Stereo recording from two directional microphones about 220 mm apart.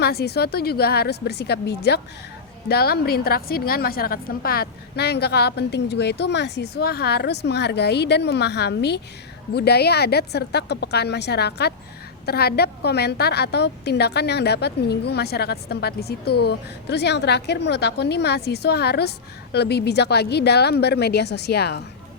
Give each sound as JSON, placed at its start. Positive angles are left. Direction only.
{"t": 0.0, "sound": "a woman's voice", "side_deg": 45}